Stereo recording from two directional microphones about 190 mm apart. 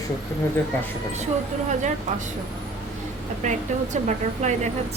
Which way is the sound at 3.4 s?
40° right (ahead or behind).